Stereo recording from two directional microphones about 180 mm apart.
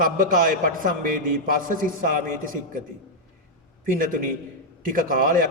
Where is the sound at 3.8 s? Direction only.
50° right (ahead or behind).